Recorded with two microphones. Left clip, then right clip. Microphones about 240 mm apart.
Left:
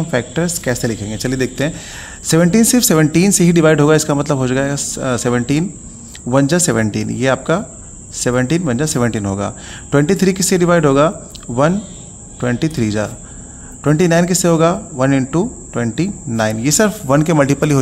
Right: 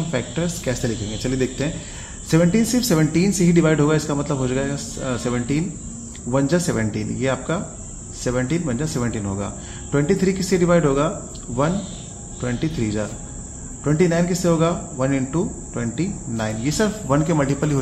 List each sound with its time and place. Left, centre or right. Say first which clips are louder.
0.1 s speech: left 8 dB; left